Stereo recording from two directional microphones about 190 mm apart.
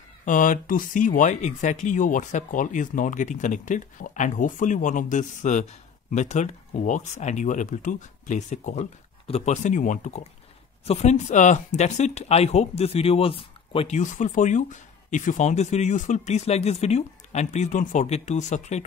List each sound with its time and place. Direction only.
0.2 s speech: 45° left (ahead or behind)